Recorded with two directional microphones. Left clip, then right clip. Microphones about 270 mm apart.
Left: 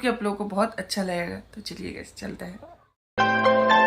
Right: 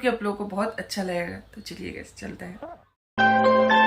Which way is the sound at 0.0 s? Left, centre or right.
Centre.